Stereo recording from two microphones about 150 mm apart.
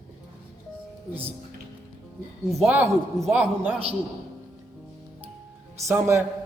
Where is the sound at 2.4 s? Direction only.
Centre (ahead or behind).